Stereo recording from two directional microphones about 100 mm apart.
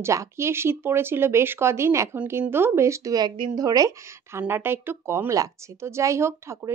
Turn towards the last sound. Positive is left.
turn(degrees=-30)  # may be behind; listen again after turning